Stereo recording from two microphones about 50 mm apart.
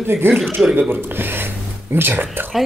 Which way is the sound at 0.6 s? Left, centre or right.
Centre.